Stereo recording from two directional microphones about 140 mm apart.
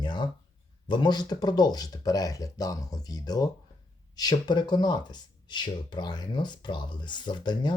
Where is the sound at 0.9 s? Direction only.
30° left (ahead or behind).